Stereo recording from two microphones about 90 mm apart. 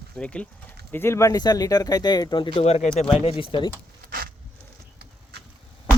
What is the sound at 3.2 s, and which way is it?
Speech, 85° left.